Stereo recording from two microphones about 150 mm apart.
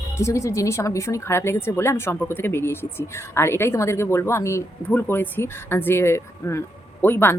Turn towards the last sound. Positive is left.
turn(degrees=15)  # may be behind; listen again after turning